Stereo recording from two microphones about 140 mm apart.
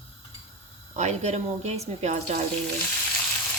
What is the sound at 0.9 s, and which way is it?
Speech, 55° right (ahead or behind).